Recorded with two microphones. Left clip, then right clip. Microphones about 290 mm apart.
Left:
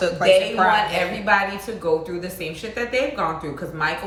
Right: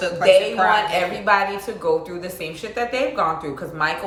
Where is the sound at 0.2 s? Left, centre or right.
Centre.